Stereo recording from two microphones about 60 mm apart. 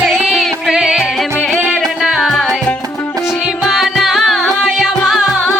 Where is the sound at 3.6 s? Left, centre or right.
Centre.